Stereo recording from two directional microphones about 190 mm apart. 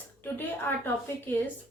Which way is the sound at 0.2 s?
10° left (ahead or behind).